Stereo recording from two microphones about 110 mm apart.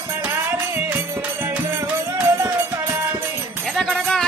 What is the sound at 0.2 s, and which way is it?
Music, 20° right (ahead or behind).